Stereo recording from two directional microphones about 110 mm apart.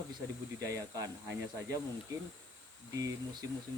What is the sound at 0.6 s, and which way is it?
Speech, 30° right (ahead or behind).